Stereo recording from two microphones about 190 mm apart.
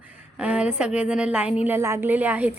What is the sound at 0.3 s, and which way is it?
A woman's voice, 5° right (ahead or behind).